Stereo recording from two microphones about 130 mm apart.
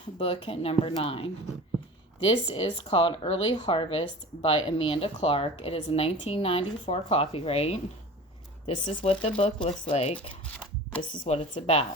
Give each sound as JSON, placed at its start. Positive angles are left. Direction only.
{"t": 0.2, "sound": "speech", "side_deg": 45}
{"t": 8.9, "sound": "speech", "side_deg": 45}
{"t": 11.5, "sound": "speech", "side_deg": 50}